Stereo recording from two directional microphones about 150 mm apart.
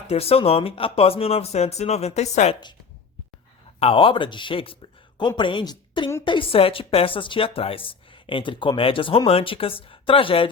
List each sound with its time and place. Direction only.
0.1 s a woman's voice: 40° left (ahead or behind)
3.8 s a woman's voice: 40° left (ahead or behind)